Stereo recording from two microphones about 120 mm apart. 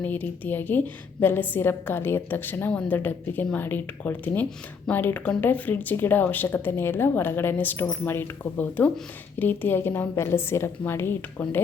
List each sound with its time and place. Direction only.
0.0 s a woman's voice: 15° left (ahead or behind)